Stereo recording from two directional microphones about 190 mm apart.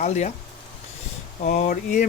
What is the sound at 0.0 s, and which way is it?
Speech, 40° left (ahead or behind).